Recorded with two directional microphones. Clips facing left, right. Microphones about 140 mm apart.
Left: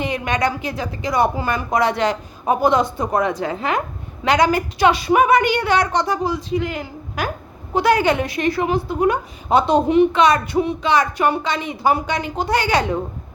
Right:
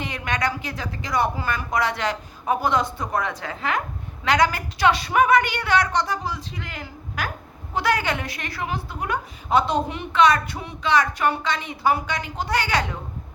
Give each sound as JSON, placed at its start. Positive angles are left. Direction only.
{"t": 0.0, "sound": "a woman's voice", "side_deg": 15}